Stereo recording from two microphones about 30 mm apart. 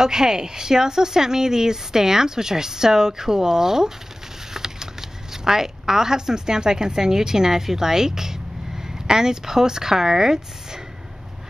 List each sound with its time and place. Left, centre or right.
0.0 s a woman's voice: centre
4.6 s a sound: centre
5.3 s a woman's voice: centre